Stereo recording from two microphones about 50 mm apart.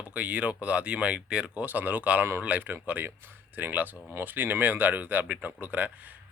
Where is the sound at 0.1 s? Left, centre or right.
Right.